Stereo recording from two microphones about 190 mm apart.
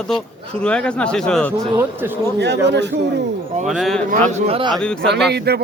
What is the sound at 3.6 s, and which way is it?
Speech, centre (ahead or behind).